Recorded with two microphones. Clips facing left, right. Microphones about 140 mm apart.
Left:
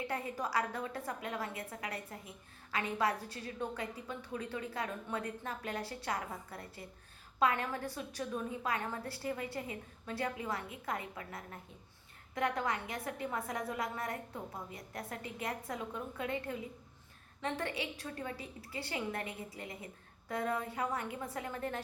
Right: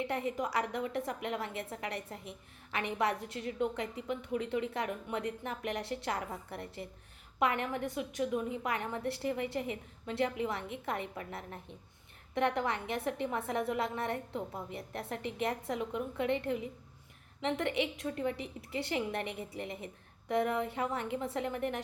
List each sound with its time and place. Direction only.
0.1 s a woman's voice: 20° right (ahead or behind)